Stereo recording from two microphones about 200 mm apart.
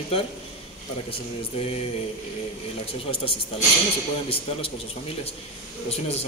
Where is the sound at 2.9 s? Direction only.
25° left (ahead or behind).